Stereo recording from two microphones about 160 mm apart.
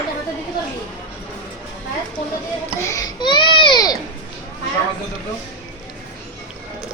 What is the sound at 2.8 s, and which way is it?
Babbling, 20° left (ahead or behind).